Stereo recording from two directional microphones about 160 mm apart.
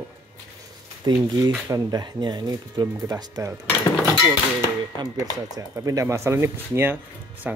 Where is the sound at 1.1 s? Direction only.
25° right (ahead or behind).